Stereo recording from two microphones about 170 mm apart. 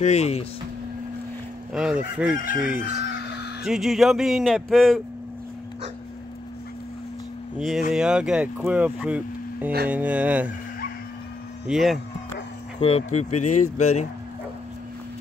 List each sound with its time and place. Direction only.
0.0 s speech: 40° left (ahead or behind)
1.7 s speech: 5° right (ahead or behind)
7.5 s speech: centre (ahead or behind)
11.6 s speech: centre (ahead or behind)
12.8 s speech: 40° left (ahead or behind)